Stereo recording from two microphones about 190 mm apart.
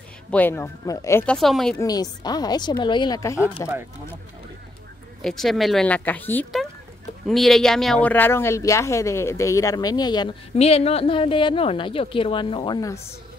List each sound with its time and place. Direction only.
0.3 s speech: 10° left (ahead or behind)
1.8 s a woman's voice: 20° left (ahead or behind)
5.2 s speech: centre (ahead or behind); by 10.3 s 20° left (ahead or behind)
10.5 s a woman's voice: 35° left (ahead or behind)